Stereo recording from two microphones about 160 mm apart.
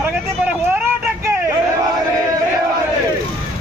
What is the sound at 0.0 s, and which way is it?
Vehicle, 15° right (ahead or behind).